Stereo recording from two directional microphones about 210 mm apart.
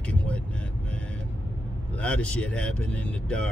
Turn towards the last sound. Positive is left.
turn(degrees=5)  # may be behind; listen again after turning